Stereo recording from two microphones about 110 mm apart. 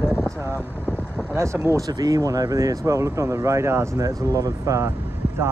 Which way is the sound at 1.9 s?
35° right (ahead or behind).